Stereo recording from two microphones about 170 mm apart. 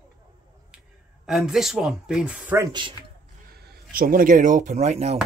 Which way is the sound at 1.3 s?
Centre (ahead or behind).